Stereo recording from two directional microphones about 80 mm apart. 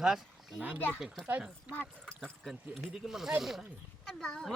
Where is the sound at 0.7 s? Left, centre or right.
Left.